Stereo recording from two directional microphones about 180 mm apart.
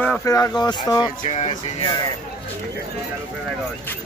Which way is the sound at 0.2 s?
20° left (ahead or behind).